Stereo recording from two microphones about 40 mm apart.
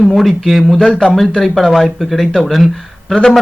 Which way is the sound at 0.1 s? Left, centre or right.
Centre.